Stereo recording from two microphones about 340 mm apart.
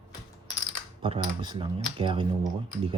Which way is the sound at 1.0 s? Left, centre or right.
Centre.